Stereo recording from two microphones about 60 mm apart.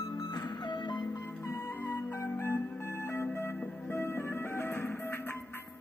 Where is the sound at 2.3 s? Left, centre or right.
Left.